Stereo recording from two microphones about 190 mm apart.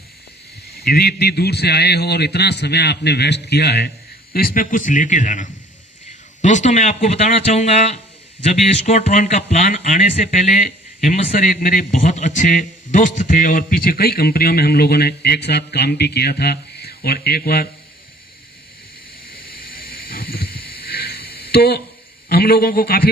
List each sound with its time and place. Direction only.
0.8 s a man's voice: 55° left (ahead or behind)
19.3 s wild animals: 50° left (ahead or behind)
22.3 s speech: 55° left (ahead or behind)